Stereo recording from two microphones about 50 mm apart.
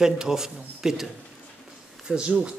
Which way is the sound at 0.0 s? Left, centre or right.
Centre.